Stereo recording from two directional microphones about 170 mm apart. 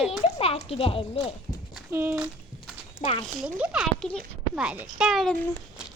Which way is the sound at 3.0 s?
35° left (ahead or behind).